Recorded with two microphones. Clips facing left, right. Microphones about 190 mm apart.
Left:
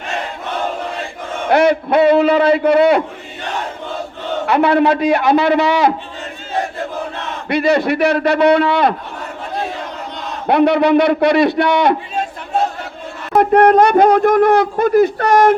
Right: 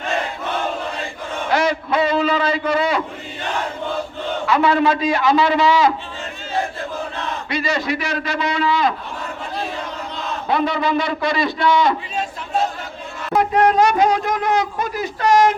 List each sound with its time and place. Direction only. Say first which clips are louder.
1.5 s speech: left 7 dB; 60° left (ahead or behind)
4.4 s speech: left 4 dB; 60° left (ahead or behind)
7.5 s speech: left 8 dB; 60° left (ahead or behind)
10.4 s speech: left 8 dB; 65° left (ahead or behind)
13.3 s speech: left 6 dB; 55° left (ahead or behind)